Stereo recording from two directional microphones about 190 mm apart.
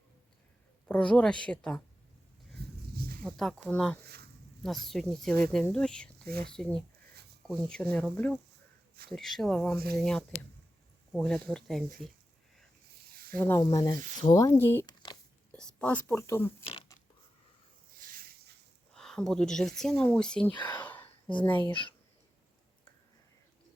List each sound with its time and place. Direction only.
0.9 s speech: 5° left (ahead or behind)
2.9 s a sound: 50° right (ahead or behind)
3.2 s speech: centre (ahead or behind)
9.7 s speech: 55° right (ahead or behind)
10.0 s speech: 5° left (ahead or behind)
13.3 s speech: 10° left (ahead or behind)
18.0 s a sound: 45° right (ahead or behind)
18.9 s speech: 5° left (ahead or behind)
20.7 s a sound: 10° left (ahead or behind)
21.7 s speech: 25° left (ahead or behind)